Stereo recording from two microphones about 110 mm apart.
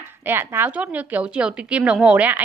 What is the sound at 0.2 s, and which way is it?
A woman's voice, 20° right (ahead or behind).